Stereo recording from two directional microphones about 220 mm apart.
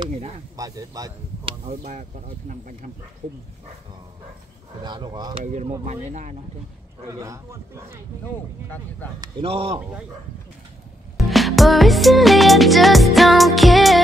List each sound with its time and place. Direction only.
0.0 s speech: 20° right (ahead or behind)
1.9 s speech: 35° right (ahead or behind)
4.8 s speech: 20° right (ahead or behind)
5.4 s speech: 35° right (ahead or behind)
7.1 s speech: 15° right (ahead or behind)
9.2 s speech: 25° right (ahead or behind)
11.1 s music: centre (ahead or behind)